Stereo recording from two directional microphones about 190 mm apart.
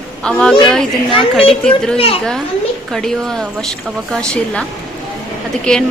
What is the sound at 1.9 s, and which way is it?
Speech, 30° left (ahead or behind).